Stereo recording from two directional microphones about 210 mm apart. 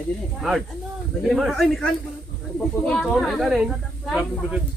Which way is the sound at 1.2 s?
Centre (ahead or behind).